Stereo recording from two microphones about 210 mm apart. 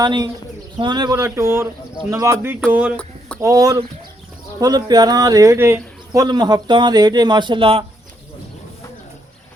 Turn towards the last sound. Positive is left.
turn(degrees=-25)  # may be behind; listen again after turning